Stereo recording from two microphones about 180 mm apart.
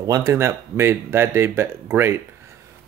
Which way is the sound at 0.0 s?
20° right (ahead or behind).